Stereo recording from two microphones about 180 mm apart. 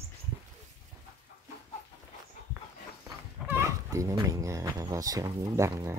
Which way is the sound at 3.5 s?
15° right (ahead or behind).